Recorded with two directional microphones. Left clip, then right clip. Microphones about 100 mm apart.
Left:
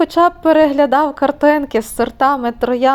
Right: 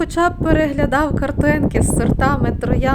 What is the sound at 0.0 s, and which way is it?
Speech, 25° left (ahead or behind).